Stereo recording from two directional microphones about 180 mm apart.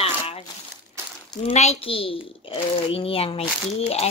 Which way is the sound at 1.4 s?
35° left (ahead or behind).